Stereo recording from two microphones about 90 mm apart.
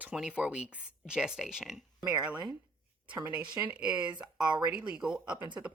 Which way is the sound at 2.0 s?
40° right (ahead or behind).